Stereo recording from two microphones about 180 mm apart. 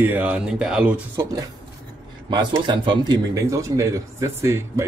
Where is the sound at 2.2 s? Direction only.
25° right (ahead or behind).